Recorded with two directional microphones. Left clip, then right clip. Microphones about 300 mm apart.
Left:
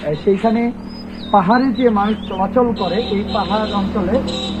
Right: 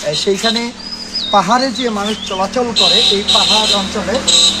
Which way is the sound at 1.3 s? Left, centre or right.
Right.